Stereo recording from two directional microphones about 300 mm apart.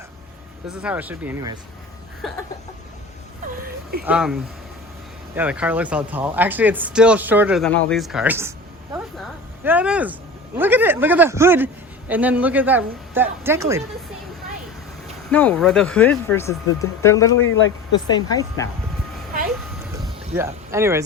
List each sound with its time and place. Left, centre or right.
0.8 s speech: centre
4.0 s a man's voice: centre
15.3 s speech: centre
17.3 s speech: left
18.1 s speech: centre
20.3 s a man's voice: centre